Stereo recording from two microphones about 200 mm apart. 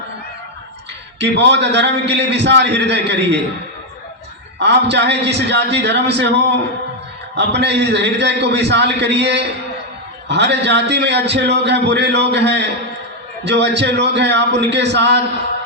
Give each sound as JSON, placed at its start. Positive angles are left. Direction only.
{"t": 1.2, "sound": "a man's voice", "side_deg": -60}
{"t": 4.6, "sound": "a man's voice", "side_deg": -60}